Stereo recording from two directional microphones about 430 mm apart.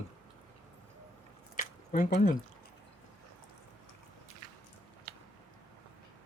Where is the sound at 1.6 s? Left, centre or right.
Centre.